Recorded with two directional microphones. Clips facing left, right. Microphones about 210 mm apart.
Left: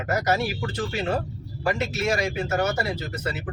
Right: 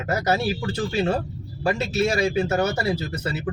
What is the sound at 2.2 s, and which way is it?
Speech, 30° right (ahead or behind).